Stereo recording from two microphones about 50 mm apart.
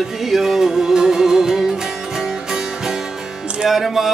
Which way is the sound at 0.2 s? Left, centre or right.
Centre.